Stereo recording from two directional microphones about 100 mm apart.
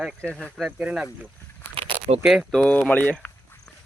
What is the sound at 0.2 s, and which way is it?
Speech, 10° left (ahead or behind).